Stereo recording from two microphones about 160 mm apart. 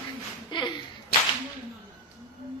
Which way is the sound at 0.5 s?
30° left (ahead or behind).